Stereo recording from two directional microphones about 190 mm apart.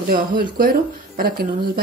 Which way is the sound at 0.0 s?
50° right (ahead or behind).